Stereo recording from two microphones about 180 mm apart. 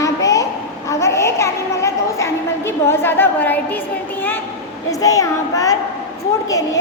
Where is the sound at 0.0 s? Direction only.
20° left (ahead or behind).